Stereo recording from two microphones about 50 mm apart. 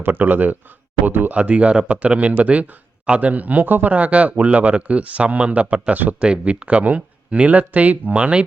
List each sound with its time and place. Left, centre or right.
0.0 s speech: right
1.4 s speech: right
6.2 s speech: right